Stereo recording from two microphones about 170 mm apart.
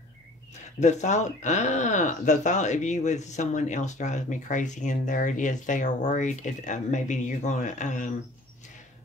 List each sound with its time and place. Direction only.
0.7 s speech: 45° left (ahead or behind)